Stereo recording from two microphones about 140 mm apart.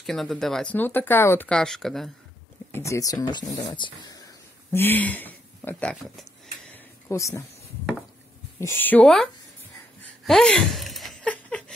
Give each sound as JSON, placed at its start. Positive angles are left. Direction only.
{"t": 0.0, "sound": "speech", "side_deg": 0}
{"t": 2.7, "sound": "speech", "side_deg": 20}
{"t": 4.7, "sound": "speech", "side_deg": 15}
{"t": 7.1, "sound": "speech", "side_deg": 20}
{"t": 8.5, "sound": "speech", "side_deg": 15}
{"t": 10.2, "sound": "a sound", "side_deg": 5}